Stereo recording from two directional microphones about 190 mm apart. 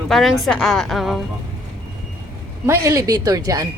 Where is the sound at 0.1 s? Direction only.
Centre (ahead or behind).